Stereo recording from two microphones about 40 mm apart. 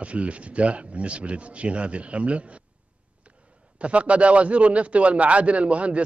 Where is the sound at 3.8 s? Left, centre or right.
Right.